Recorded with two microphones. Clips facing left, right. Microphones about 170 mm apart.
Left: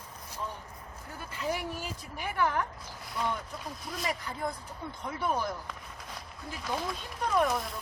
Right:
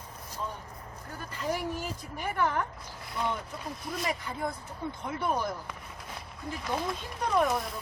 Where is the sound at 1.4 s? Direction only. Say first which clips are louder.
Right 2 dB; 5° left (ahead or behind).